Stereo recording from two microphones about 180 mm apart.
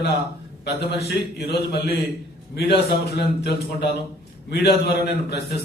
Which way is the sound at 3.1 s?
65° left (ahead or behind).